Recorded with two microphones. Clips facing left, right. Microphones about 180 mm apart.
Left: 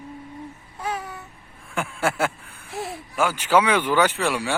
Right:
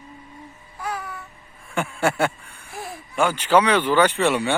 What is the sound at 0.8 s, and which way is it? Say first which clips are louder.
Babbling: left 1 dB; 20° left (ahead or behind).